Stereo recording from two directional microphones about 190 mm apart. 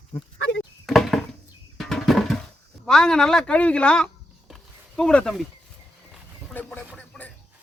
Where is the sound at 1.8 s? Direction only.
Centre (ahead or behind).